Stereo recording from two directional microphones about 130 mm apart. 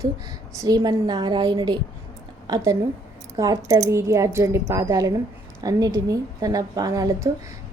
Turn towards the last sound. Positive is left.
turn(degrees=-25)  # may be behind; listen again after turning